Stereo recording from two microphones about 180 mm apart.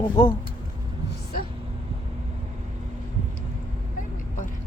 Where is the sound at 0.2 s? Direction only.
25° left (ahead or behind).